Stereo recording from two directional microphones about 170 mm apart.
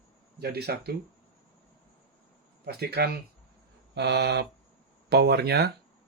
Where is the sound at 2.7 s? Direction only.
70° right (ahead or behind).